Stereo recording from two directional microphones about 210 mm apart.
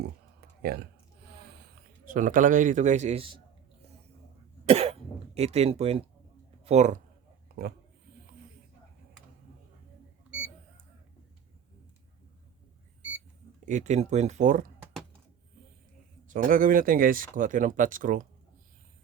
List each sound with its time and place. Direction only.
0.6 s speech: 50° right (ahead or behind)
2.0 s a man's voice: 40° right (ahead or behind)
4.6 s cough: 30° right (ahead or behind)
6.7 s a man's voice: 35° right (ahead or behind)
7.4 s a sound: 45° right (ahead or behind)
13.7 s a man's voice: 35° right (ahead or behind)
16.3 s a man's voice: 40° right (ahead or behind)